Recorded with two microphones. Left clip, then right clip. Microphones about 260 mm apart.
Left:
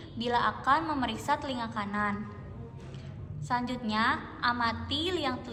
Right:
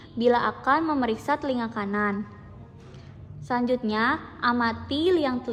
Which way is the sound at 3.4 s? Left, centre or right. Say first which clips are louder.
Right 6 dB; right.